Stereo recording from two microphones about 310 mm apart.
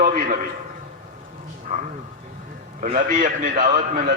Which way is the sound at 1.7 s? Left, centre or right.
Right.